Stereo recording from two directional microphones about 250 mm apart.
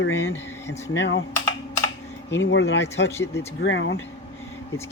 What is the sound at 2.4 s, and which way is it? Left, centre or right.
Speech, left.